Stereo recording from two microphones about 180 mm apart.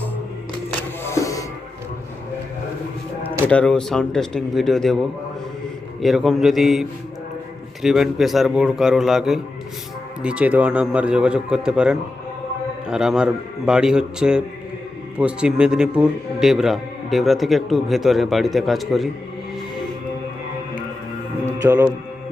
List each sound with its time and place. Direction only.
1.0 s music: 15° left (ahead or behind)
3.4 s a man's voice: 5° left (ahead or behind)
6.0 s a man's voice: centre (ahead or behind)
21.6 s speech: 10° right (ahead or behind)